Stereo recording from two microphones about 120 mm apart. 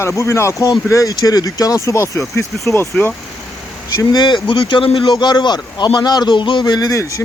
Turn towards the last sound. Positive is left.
turn(degrees=25)  # may be behind; listen again after turning